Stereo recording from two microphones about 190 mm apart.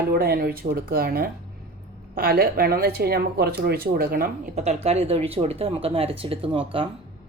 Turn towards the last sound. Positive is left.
turn(degrees=-30)  # may be behind; listen again after turning